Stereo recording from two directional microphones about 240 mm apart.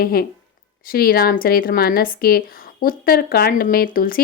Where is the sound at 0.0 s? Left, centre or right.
Left.